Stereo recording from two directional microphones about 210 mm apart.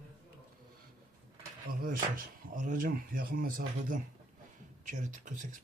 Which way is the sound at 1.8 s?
40° right (ahead or behind).